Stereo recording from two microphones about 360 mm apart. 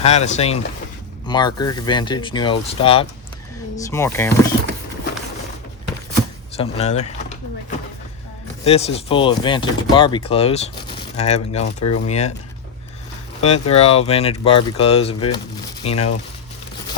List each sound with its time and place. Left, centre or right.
0.0 s speech: centre
6.6 s speech: centre
8.6 s speech: centre
13.4 s speech: centre